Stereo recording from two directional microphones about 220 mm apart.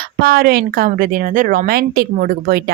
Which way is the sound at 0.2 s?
45° right (ahead or behind).